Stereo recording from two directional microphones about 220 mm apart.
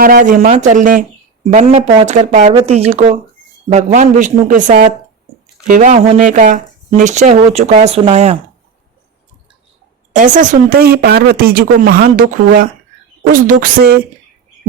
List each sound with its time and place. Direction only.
0.0 s speech: 40° right (ahead or behind)
10.1 s speech: 35° right (ahead or behind)